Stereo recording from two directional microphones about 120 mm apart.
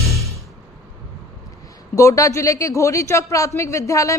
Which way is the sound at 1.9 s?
25° left (ahead or behind).